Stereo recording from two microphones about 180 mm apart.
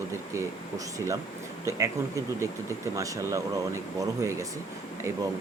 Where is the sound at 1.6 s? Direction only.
15° right (ahead or behind).